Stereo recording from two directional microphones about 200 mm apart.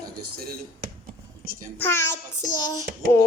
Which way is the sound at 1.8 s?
10° left (ahead or behind).